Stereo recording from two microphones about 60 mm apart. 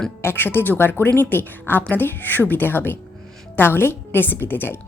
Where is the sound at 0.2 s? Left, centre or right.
Left.